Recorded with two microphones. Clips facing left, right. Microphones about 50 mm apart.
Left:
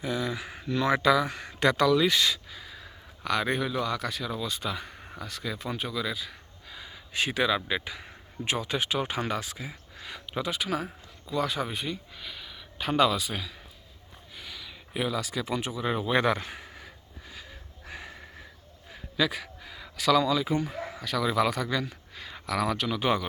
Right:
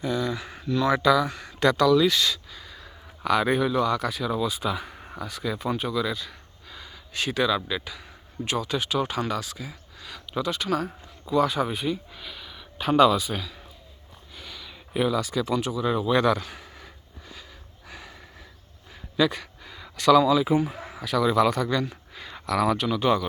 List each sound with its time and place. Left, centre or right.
0.0 s speech: centre
3.2 s speech: centre
11.3 s speech: centre
14.3 s a sound: centre
15.4 s speech: left
16.6 s a sound: centre
18.9 s speech: centre
23.0 s speech: centre